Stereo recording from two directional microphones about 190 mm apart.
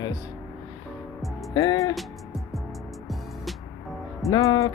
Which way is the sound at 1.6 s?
20° left (ahead or behind).